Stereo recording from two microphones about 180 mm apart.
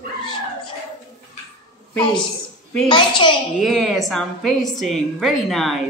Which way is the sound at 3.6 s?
Centre (ahead or behind).